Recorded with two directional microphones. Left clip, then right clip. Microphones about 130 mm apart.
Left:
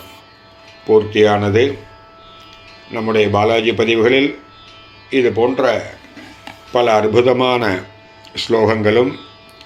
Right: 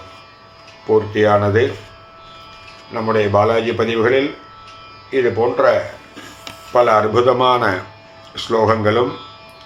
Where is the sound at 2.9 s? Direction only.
50° left (ahead or behind).